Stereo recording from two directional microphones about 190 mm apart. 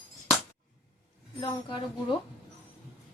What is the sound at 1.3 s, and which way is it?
Speech, 25° left (ahead or behind).